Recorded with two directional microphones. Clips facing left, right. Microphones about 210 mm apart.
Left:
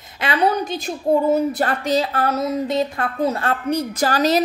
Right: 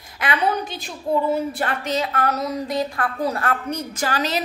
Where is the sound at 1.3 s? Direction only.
40° left (ahead or behind).